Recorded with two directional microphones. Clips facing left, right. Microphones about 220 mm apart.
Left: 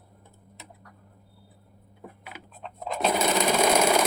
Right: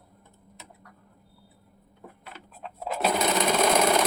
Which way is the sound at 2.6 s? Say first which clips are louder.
Even; 5° right (ahead or behind).